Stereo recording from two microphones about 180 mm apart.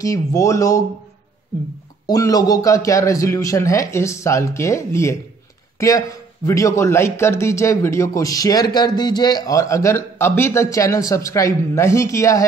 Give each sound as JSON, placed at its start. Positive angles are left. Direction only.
{"t": 0.0, "sound": "a man's voice", "side_deg": 20}
{"t": 2.0, "sound": "a man's voice", "side_deg": 20}